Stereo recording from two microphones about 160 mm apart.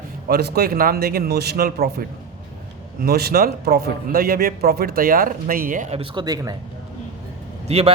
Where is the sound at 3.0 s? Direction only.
75° right (ahead or behind); by 5.9 s 55° right (ahead or behind).